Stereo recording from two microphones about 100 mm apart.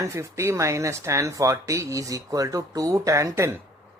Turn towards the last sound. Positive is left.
turn(degrees=-30)  # may be behind; listen again after turning